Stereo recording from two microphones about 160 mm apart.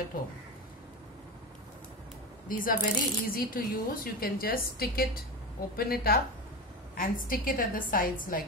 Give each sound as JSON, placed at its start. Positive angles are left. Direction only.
{"t": 2.4, "sound": "speech", "side_deg": 60}
{"t": 7.0, "sound": "a woman's voice", "side_deg": 60}